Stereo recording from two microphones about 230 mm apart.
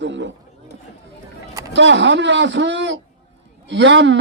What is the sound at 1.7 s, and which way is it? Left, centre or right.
Speech, right.